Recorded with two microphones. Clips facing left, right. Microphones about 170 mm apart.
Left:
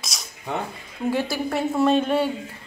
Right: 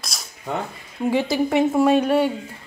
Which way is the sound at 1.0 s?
15° right (ahead or behind).